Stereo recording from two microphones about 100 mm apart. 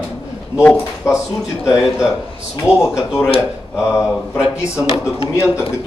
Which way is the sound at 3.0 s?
5° right (ahead or behind).